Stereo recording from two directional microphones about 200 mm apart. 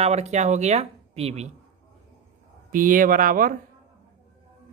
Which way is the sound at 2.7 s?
40° right (ahead or behind).